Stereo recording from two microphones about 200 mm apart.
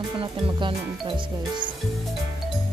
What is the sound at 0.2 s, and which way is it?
Speech, 25° right (ahead or behind).